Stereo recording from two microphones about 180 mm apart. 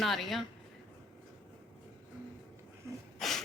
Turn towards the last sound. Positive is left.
turn(degrees=0)  # may be behind; listen again after turning